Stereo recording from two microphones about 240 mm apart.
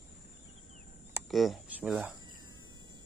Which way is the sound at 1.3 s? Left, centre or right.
Centre.